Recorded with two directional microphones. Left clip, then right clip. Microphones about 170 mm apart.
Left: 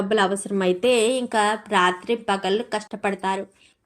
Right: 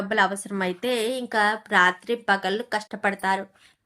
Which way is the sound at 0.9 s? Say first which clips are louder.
Left 6 dB; 15° left (ahead or behind).